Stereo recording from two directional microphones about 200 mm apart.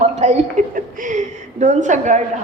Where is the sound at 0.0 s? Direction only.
35° right (ahead or behind).